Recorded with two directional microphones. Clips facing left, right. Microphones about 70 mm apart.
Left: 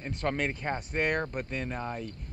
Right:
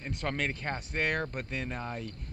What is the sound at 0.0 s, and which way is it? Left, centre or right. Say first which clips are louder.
Speech: left 3 dB; centre.